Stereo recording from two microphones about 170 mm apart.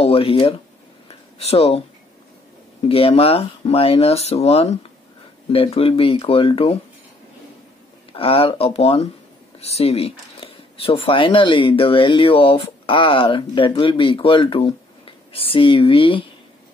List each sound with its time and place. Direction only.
0.0 s speech: 35° left (ahead or behind)
2.9 s speech: 35° left (ahead or behind)
8.1 s speech: 35° left (ahead or behind)